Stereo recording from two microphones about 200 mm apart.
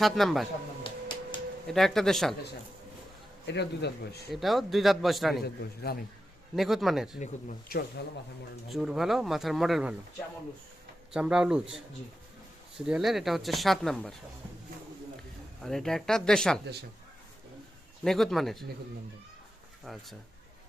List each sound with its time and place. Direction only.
0.0 s speech: centre (ahead or behind)
0.9 s a sound: 25° left (ahead or behind)
1.6 s speech: centre (ahead or behind)
3.4 s a man's voice: 60° left (ahead or behind)
4.3 s speech: centre (ahead or behind)
5.9 s speech: 50° left (ahead or behind)
6.6 s speech: centre (ahead or behind)
7.7 s speech: 50° left (ahead or behind)
8.7 s speech: centre (ahead or behind)
11.1 s speech: 5° right (ahead or behind)
12.7 s speech: centre (ahead or behind)
15.6 s speech: centre (ahead or behind)
18.0 s speech: centre (ahead or behind)
19.8 s speech: centre (ahead or behind)